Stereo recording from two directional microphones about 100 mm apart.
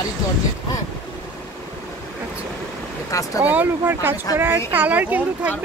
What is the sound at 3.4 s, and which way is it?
Speech, 20° right (ahead or behind).